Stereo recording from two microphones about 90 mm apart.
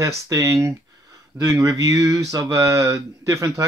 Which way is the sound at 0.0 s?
35° right (ahead or behind).